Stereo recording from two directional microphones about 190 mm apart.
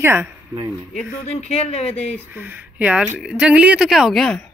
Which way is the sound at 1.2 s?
35° left (ahead or behind).